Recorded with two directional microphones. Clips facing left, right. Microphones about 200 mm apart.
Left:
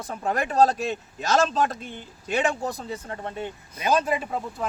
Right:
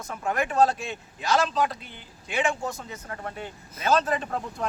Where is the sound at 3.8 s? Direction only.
15° left (ahead or behind).